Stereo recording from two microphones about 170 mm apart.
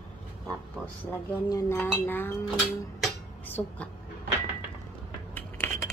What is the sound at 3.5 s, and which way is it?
Speech, 10° left (ahead or behind).